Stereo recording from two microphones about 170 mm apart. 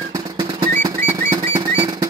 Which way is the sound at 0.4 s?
20° right (ahead or behind).